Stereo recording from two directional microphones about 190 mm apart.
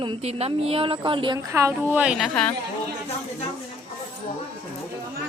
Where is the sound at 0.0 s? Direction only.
30° right (ahead or behind).